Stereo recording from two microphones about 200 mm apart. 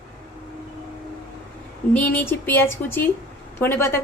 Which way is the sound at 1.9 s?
10° left (ahead or behind).